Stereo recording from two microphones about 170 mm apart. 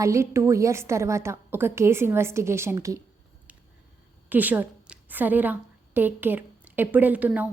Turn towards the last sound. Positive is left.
turn(degrees=-10)  # may be behind; listen again after turning